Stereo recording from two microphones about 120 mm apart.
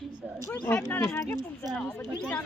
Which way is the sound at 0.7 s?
10° left (ahead or behind).